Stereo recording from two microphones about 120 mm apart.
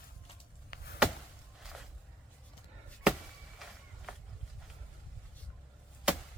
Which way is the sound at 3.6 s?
Centre (ahead or behind).